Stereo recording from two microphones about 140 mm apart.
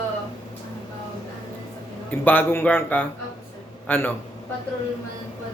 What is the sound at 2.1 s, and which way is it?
Speech, 10° left (ahead or behind).